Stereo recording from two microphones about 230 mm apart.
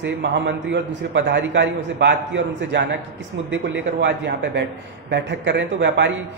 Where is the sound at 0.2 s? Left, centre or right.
Right.